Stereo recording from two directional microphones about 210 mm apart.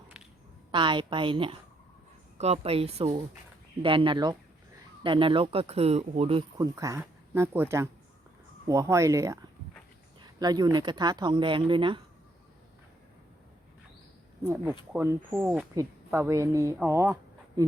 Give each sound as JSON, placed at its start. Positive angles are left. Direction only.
{"t": 0.7, "sound": "speech", "side_deg": -25}
{"t": 6.7, "sound": "speech", "side_deg": -15}
{"t": 14.4, "sound": "speech", "side_deg": -10}